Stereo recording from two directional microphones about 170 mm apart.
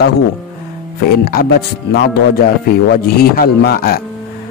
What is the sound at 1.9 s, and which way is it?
A man's voice, 70° left (ahead or behind).